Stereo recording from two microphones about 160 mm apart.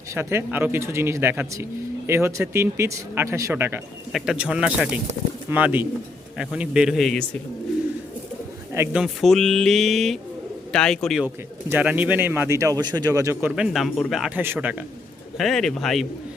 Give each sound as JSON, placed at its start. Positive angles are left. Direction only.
{"t": 0.1, "sound": "speech", "side_deg": -15}
{"t": 8.7, "sound": "speech", "side_deg": -15}
{"t": 9.0, "sound": "speech", "side_deg": 0}
{"t": 11.7, "sound": "speech", "side_deg": -10}
{"t": 13.6, "sound": "speech", "side_deg": 0}
{"t": 15.4, "sound": "speech", "side_deg": 0}